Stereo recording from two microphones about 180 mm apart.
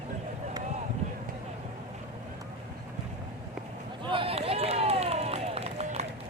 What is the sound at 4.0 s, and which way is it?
Run, 30° right (ahead or behind).